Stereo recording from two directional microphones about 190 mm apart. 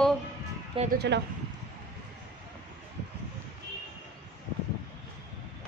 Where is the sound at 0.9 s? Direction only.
65° right (ahead or behind).